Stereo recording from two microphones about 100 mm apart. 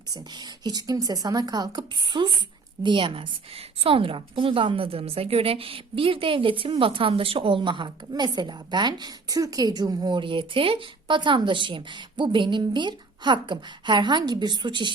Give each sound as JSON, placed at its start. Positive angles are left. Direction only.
{"t": 0.1, "sound": "a woman's voice", "side_deg": -45}